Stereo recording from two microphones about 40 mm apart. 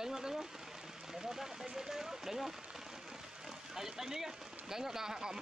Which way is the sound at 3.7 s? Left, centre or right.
Centre.